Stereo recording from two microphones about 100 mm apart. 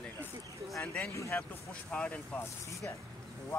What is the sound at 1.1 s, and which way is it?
Speech, 30° left (ahead or behind).